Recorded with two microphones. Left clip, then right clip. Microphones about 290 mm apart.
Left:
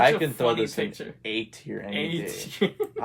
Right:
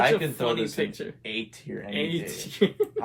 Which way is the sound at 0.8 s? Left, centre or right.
Centre.